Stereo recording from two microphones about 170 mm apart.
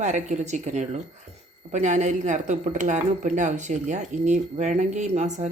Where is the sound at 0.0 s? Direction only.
45° right (ahead or behind).